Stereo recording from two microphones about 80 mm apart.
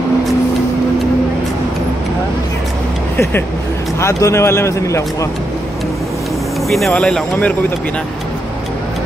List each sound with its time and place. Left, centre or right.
4.0 s a man's voice: left
6.9 s speech: centre